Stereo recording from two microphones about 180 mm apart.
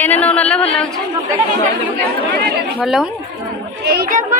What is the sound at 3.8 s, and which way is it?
Speech, 60° right (ahead or behind).